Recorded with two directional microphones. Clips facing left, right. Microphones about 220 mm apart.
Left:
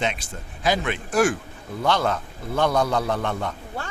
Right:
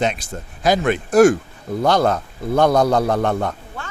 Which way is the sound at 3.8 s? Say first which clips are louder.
Left 1 dB; 35° left (ahead or behind).